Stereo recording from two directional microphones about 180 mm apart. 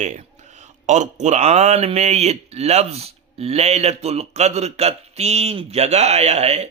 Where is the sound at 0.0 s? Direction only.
40° right (ahead or behind).